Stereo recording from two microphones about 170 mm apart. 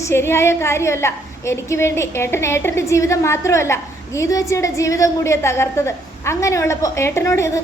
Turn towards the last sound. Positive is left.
turn(degrees=15)  # may be behind; listen again after turning